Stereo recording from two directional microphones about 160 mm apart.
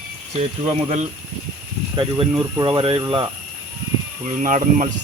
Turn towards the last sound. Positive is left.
turn(degrees=-50)  # may be behind; listen again after turning